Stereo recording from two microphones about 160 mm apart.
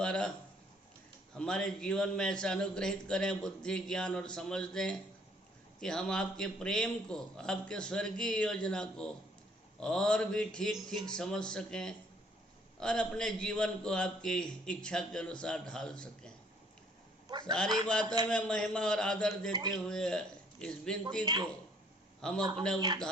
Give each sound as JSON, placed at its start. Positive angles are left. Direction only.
{"t": 0.0, "sound": "speech", "side_deg": 5}
{"t": 1.4, "sound": "a man's voice", "side_deg": 5}
{"t": 17.4, "sound": "a man's voice", "side_deg": 5}
{"t": 21.2, "sound": "speech", "side_deg": -25}
{"t": 22.2, "sound": "a man's voice", "side_deg": 5}